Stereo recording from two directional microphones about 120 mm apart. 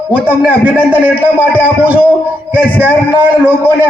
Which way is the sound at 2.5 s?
15° right (ahead or behind).